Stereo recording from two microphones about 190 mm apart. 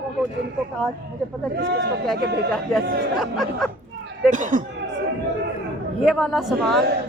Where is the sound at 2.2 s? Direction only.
55° right (ahead or behind).